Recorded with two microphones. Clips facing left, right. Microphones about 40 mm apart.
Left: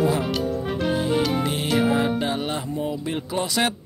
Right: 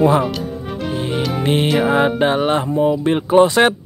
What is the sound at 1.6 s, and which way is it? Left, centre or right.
Music, centre.